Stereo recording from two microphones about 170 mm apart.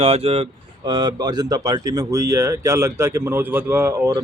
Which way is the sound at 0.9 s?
25° right (ahead or behind).